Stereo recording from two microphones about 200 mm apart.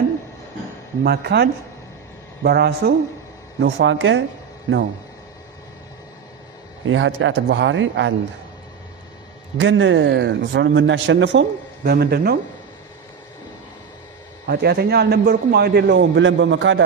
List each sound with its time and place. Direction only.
1.0 s speech: 55° right (ahead or behind)
3.6 s speech: 65° right (ahead or behind)
6.8 s speech: 70° right (ahead or behind)
9.6 s speech: 70° right (ahead or behind); by 12.4 s 50° right (ahead or behind)
14.4 s speech: 50° right (ahead or behind); by 16.8 s 70° right (ahead or behind)